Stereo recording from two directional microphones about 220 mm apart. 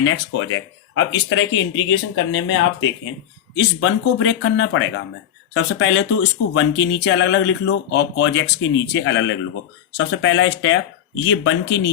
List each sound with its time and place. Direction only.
0.0 s speech: 60° left (ahead or behind)